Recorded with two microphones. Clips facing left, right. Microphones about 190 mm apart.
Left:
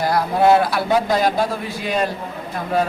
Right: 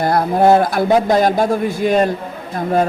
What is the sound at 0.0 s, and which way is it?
A man's voice, 50° right (ahead or behind).